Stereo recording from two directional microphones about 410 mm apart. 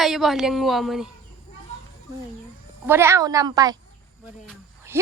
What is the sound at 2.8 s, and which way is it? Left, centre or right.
Speech, centre.